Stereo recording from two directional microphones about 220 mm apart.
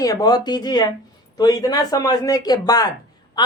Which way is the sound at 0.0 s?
15° left (ahead or behind).